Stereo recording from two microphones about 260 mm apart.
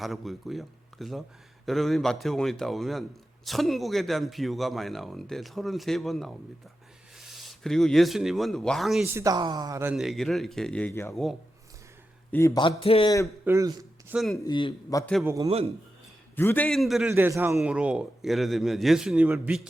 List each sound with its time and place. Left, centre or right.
0.0 s a man's voice: centre
9.2 s a man's voice: centre
13.4 s speech: centre
14.4 s a man's voice: centre
15.1 s a man's voice: centre
15.4 s speech: right
16.3 s a man's voice: centre